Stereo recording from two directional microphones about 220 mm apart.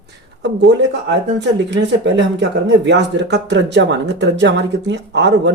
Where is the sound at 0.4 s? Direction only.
55° right (ahead or behind).